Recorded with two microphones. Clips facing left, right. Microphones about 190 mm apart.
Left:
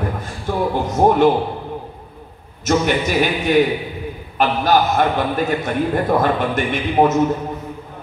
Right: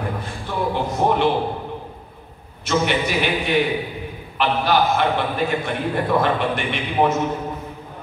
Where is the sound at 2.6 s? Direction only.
45° left (ahead or behind).